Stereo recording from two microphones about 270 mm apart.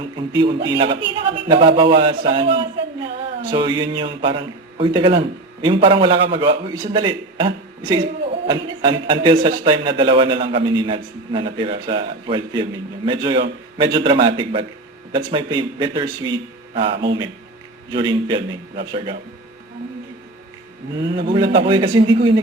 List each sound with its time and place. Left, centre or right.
0.3 s a man's voice: centre
21.2 s a man's voice: centre